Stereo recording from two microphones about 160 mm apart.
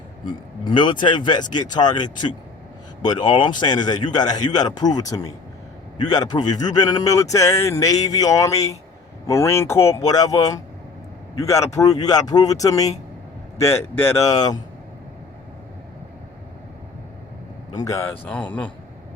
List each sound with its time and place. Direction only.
0.6 s a man's voice: 30° left (ahead or behind)
17.7 s speech: 20° left (ahead or behind)